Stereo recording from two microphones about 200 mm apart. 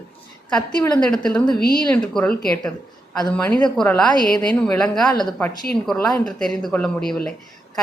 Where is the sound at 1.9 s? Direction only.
5° left (ahead or behind).